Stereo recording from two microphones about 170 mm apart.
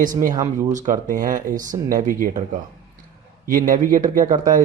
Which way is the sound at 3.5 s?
55° right (ahead or behind).